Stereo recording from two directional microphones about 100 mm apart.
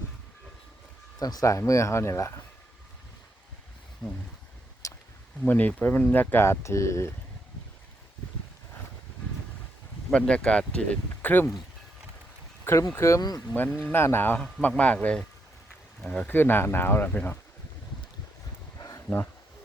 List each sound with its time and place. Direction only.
1.2 s speech: 40° left (ahead or behind)
4.8 s a sound: 30° left (ahead or behind)
5.5 s speech: 15° left (ahead or behind)
10.1 s speech: 10° left (ahead or behind)
12.7 s speech: 20° left (ahead or behind)
14.3 s speech: 5° left (ahead or behind)